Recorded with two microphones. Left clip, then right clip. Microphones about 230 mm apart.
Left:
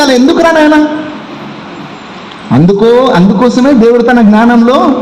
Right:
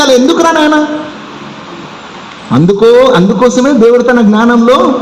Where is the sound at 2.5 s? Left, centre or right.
Left.